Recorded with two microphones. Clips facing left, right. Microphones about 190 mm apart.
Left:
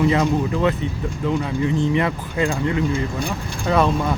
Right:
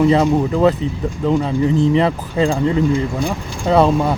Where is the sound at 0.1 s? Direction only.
30° right (ahead or behind).